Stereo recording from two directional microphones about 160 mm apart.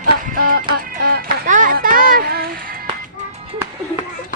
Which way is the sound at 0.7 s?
65° right (ahead or behind).